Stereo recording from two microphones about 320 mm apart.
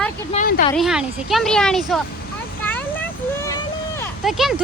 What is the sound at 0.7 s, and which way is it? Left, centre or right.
Speech, centre.